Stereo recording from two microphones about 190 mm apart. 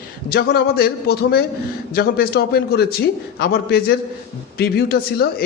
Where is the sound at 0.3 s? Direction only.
55° left (ahead or behind).